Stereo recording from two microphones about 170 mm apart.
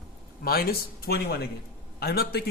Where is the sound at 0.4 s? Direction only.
65° left (ahead or behind).